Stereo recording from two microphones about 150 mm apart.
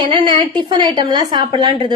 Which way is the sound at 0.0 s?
35° right (ahead or behind).